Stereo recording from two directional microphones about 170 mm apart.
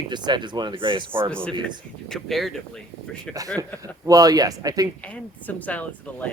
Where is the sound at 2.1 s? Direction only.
Centre (ahead or behind).